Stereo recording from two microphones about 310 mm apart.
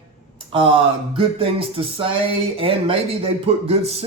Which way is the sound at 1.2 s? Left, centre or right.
Centre.